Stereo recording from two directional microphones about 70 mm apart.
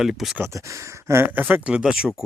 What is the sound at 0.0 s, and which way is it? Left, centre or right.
Speech, centre.